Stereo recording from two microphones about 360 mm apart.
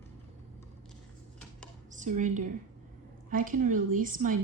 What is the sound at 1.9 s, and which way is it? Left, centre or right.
A woman's voice, centre.